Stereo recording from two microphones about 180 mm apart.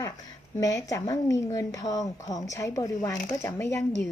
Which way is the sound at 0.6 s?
20° left (ahead or behind).